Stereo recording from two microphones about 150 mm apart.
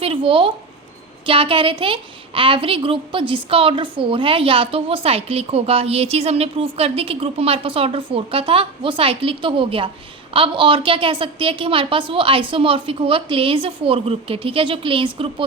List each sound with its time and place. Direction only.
0.0 s a woman's voice: 35° right (ahead or behind)